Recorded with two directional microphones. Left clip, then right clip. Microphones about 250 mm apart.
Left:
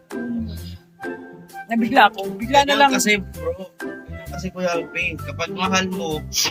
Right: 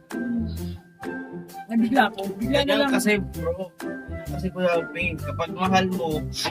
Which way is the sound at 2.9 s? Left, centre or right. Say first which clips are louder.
Left 4 dB; centre.